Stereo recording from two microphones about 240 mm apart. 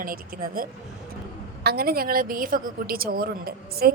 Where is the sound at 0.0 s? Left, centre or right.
Right.